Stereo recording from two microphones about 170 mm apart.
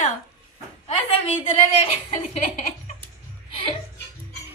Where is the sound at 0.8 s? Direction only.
35° left (ahead or behind).